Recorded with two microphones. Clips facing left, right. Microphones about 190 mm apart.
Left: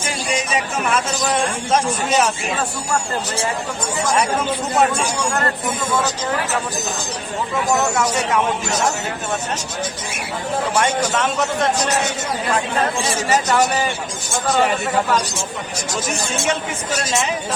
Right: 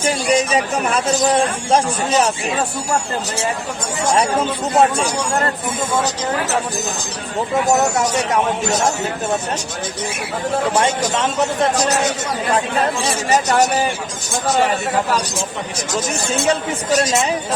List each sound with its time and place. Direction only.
0.0 s speech: 35° right (ahead or behind)
4.4 s speech: 30° right (ahead or behind)
7.7 s speech: 45° right (ahead or behind)